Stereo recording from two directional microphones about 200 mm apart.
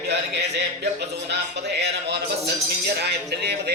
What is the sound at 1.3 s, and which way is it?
Speech, 55° right (ahead or behind).